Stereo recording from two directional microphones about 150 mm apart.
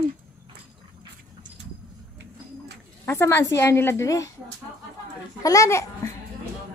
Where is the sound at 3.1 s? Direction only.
15° left (ahead or behind).